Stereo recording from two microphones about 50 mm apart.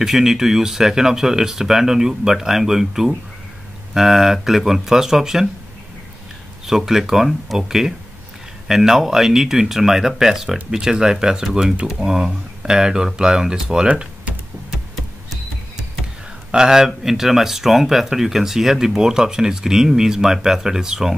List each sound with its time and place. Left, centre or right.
0.0 s speech: centre
6.6 s speech: centre
13.8 s a sound: right
16.5 s speech: centre